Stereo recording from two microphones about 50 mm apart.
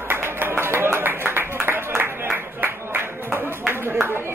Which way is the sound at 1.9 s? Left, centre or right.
Right.